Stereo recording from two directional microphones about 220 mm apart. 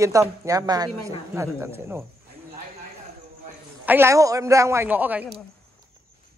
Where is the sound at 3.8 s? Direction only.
10° right (ahead or behind).